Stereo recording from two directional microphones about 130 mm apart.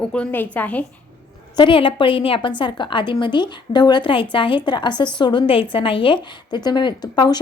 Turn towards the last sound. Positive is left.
turn(degrees=35)  # may be behind; listen again after turning